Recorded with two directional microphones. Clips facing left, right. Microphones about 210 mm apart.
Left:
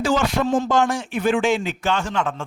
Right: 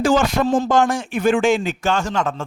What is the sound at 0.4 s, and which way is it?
Speech, 35° right (ahead or behind).